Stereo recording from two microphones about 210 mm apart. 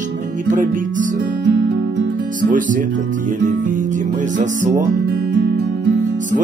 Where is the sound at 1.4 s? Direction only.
60° right (ahead or behind).